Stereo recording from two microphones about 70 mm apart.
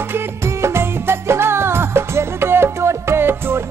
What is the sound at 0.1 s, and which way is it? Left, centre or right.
Music, right.